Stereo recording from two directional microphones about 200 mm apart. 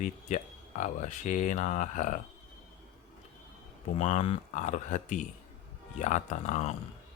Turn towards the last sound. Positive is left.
turn(degrees=35)  # may be behind; listen again after turning